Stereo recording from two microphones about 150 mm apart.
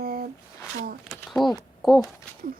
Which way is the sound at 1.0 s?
Centre (ahead or behind).